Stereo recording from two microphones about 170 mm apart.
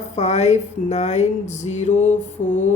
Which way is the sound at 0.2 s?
40° left (ahead or behind).